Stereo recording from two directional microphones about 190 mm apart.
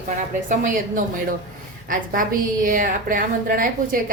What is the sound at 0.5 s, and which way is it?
A woman's voice, 45° right (ahead or behind).